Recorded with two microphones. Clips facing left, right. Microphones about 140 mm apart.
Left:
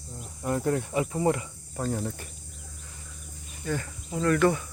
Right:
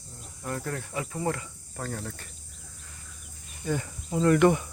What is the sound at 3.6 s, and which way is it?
Speech, 15° right (ahead or behind).